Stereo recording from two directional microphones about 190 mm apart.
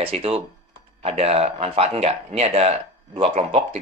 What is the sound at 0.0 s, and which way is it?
Speech, 30° right (ahead or behind).